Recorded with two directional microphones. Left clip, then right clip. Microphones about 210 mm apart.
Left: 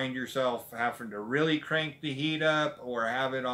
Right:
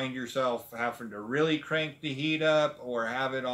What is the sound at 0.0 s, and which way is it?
Speech, centre (ahead or behind).